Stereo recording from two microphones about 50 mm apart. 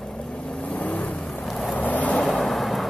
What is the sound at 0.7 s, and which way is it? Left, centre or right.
Vehicle, left.